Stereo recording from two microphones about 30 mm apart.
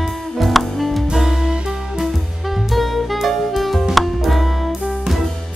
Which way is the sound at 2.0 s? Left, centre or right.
Centre.